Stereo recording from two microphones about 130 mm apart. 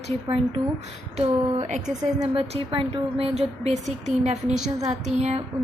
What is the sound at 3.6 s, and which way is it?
Speech, 60° right (ahead or behind).